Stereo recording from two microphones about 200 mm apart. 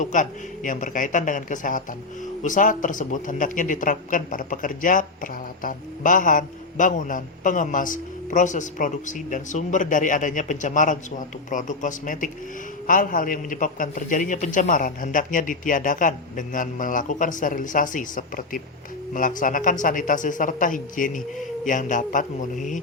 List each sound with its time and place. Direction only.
0.0 s speech: 40° left (ahead or behind)